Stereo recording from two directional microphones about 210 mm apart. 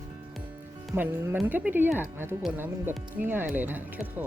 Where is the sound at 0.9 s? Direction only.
10° right (ahead or behind).